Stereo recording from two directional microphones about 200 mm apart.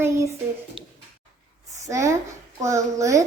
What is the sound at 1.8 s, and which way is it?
A woman's voice, 15° right (ahead or behind).